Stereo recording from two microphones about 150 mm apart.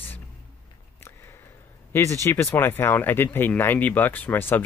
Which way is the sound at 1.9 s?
15° left (ahead or behind).